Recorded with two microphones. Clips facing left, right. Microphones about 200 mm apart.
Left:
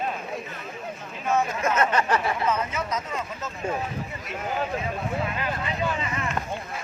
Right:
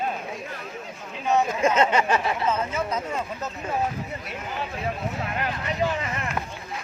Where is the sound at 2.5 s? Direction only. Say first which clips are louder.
Right 1 dB; 30° right (ahead or behind).